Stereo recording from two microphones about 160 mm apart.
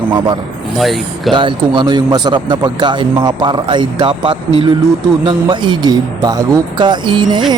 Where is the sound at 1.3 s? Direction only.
30° right (ahead or behind).